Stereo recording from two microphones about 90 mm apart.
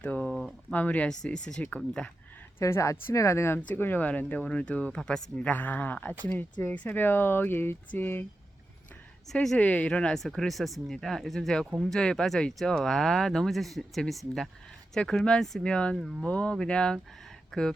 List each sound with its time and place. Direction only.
0.0 s a sound: 15° left (ahead or behind)
0.7 s speech: 15° left (ahead or behind)
2.6 s speech: 30° left (ahead or behind)
9.3 s speech: 5° left (ahead or behind)
9.6 s speech: 15° left (ahead or behind)
16.0 s speech: 5° right (ahead or behind)
16.2 s speech: 15° left (ahead or behind)